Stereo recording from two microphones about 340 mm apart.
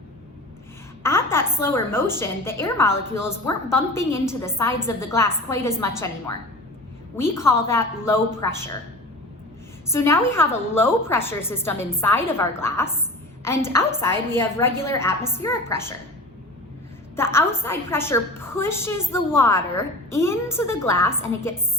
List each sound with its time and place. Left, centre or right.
1.0 s a woman's voice: centre
7.2 s a woman's voice: centre
9.9 s a woman's voice: centre
17.2 s a woman's voice: centre